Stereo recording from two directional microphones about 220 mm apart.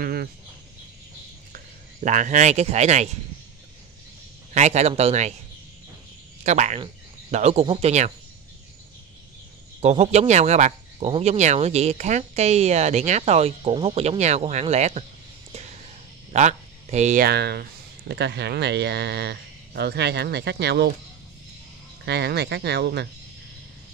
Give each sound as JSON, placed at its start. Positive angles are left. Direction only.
{"t": 0.0, "sound": "speech", "side_deg": -40}
{"t": 1.5, "sound": "speech", "side_deg": -35}
{"t": 4.6, "sound": "speech", "side_deg": -30}
{"t": 6.4, "sound": "speech", "side_deg": -30}
{"t": 9.8, "sound": "speech", "side_deg": -30}
{"t": 22.0, "sound": "speech", "side_deg": -50}